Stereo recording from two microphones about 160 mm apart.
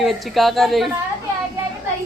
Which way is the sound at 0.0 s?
Centre (ahead or behind).